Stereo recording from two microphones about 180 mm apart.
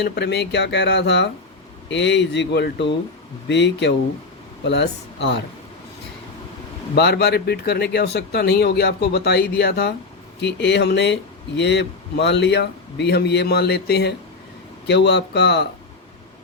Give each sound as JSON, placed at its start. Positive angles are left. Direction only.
{"t": 0.0, "sound": "speech", "side_deg": 70}
{"t": 6.9, "sound": "speech", "side_deg": 65}
{"t": 10.4, "sound": "speech", "side_deg": 75}